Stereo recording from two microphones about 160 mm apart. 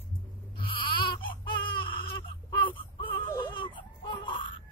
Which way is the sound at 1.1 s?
30° left (ahead or behind).